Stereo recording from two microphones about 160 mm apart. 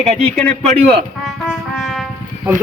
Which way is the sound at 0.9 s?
Centre (ahead or behind).